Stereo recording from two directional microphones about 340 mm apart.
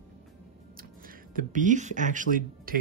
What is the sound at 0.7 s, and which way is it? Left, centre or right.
Speech, right.